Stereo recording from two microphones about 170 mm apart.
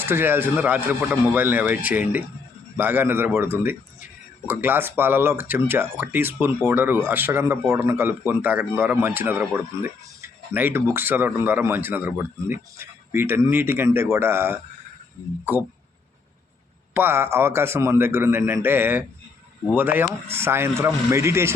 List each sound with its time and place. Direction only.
0.0 s speech: 15° right (ahead or behind)
16.9 s speech: 15° right (ahead or behind)